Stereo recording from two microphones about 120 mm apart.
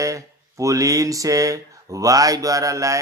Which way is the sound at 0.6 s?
30° right (ahead or behind).